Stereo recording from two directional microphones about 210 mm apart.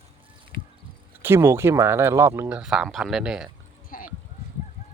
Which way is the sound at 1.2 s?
10° right (ahead or behind).